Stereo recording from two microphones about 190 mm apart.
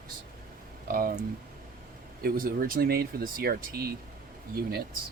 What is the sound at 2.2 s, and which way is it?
Speech, 50° right (ahead or behind).